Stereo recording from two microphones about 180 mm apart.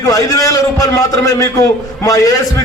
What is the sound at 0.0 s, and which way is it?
A man's voice, 20° left (ahead or behind).